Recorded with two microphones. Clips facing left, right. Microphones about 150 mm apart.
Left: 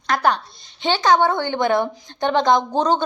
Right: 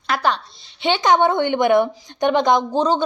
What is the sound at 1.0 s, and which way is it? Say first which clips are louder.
A woman's voice: right 1 dB; 20° right (ahead or behind).